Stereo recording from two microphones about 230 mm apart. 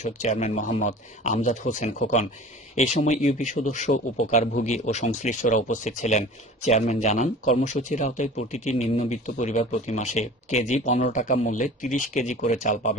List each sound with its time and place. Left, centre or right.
0.0 s a man's voice: left